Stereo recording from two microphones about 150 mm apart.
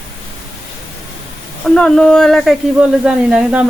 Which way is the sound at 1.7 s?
5° left (ahead or behind).